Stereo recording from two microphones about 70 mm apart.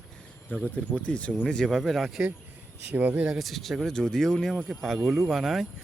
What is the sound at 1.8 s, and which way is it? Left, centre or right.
Speech, centre.